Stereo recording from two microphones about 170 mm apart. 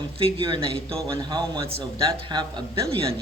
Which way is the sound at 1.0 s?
20° right (ahead or behind).